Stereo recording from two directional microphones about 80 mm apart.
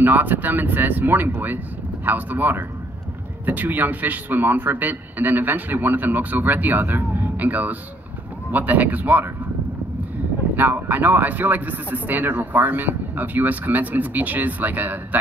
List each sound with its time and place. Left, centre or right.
0.0 s speech: right
10.5 s speech: right